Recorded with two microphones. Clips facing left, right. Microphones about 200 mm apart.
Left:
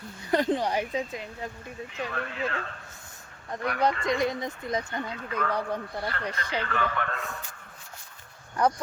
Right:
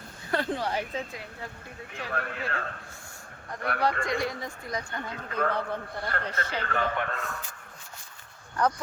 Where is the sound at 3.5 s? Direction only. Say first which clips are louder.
Left 2 dB; 20° left (ahead or behind).